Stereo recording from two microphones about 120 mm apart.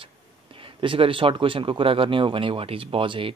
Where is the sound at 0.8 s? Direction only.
45° right (ahead or behind).